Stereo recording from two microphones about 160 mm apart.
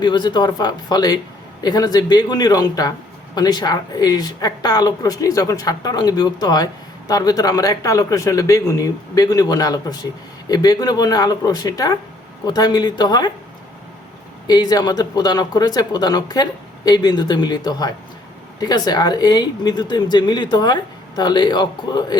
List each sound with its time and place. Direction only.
0.0 s speech: 25° left (ahead or behind)
14.4 s speech: 25° left (ahead or behind)